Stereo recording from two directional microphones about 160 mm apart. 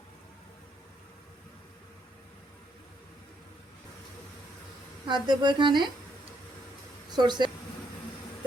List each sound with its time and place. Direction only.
5.0 s speech: 25° right (ahead or behind)
7.2 s speech: 25° right (ahead or behind)